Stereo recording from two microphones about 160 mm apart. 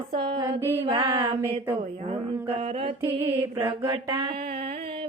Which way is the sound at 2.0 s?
35° right (ahead or behind).